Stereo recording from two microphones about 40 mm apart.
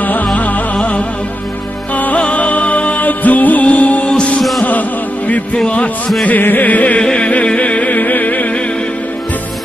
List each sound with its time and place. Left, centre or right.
0.0 s music: left
2.0 s music: left
4.4 s music: centre
6.2 s music: left